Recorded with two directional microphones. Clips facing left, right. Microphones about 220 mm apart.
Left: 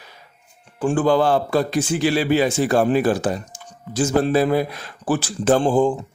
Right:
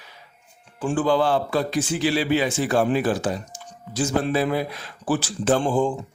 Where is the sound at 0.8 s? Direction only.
50° left (ahead or behind).